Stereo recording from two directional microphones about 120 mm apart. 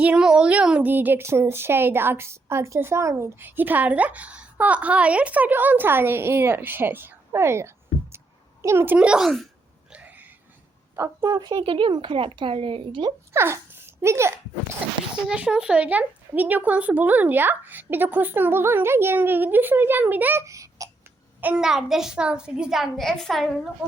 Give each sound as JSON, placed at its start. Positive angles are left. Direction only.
{"t": 0.0, "sound": "speech", "side_deg": -10}
{"t": 9.9, "sound": "a sound", "side_deg": -10}
{"t": 10.9, "sound": "a woman's voice", "side_deg": -25}
{"t": 11.5, "sound": "speech", "side_deg": -50}
{"t": 13.3, "sound": "speech", "side_deg": -20}
{"t": 15.1, "sound": "speech", "side_deg": -10}
{"t": 21.4, "sound": "a child's voice", "side_deg": -5}